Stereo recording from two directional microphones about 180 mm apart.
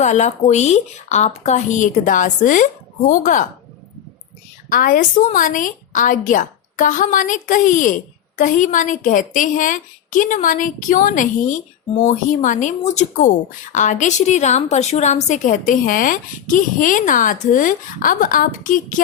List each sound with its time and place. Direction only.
0.0 s a woman's voice: 40° left (ahead or behind)
4.7 s a woman's voice: 50° left (ahead or behind)